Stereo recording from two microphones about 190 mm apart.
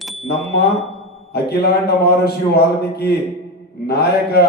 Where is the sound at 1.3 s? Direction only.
60° left (ahead or behind).